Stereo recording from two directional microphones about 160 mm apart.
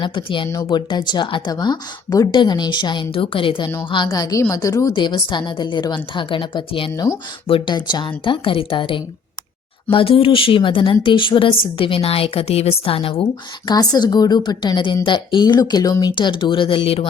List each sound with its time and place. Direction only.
0.0 s a woman's voice: 30° left (ahead or behind)
13.7 s speech: 25° left (ahead or behind)